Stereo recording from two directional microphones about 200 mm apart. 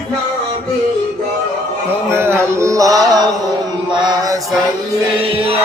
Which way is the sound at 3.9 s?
20° right (ahead or behind).